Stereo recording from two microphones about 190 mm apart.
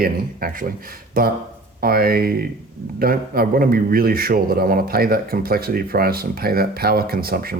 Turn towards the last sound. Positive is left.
turn(degrees=-50)  # may be behind; listen again after turning